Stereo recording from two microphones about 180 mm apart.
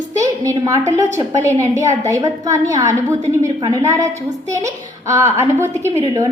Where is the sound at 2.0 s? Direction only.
20° right (ahead or behind).